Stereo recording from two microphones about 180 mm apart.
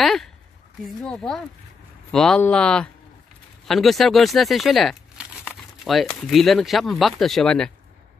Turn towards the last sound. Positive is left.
turn(degrees=5)  # may be behind; listen again after turning